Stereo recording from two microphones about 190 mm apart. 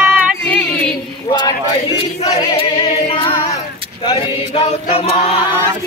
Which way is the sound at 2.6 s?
30° left (ahead or behind).